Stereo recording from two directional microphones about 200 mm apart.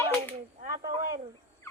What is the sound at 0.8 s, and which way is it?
Cricket, 40° right (ahead or behind).